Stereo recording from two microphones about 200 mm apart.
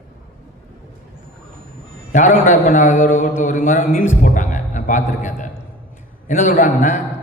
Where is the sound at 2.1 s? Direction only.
40° left (ahead or behind).